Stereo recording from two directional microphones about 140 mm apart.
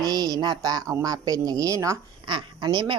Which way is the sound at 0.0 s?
25° right (ahead or behind).